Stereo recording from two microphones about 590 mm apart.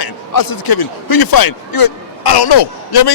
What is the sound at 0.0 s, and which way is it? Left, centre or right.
A man's voice, left.